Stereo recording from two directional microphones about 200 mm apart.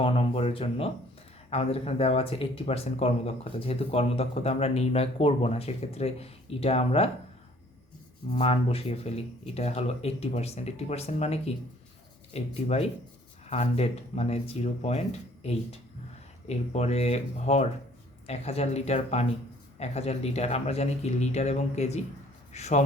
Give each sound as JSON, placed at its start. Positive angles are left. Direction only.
{"t": 0.0, "sound": "speech", "side_deg": 30}
{"t": 8.4, "sound": "speech", "side_deg": 30}
{"t": 16.5, "sound": "speech", "side_deg": 35}